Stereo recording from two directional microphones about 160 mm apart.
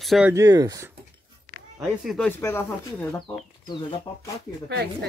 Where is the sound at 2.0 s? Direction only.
5° left (ahead or behind).